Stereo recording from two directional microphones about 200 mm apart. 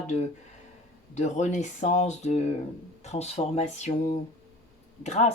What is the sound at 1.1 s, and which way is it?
Speech, 35° left (ahead or behind).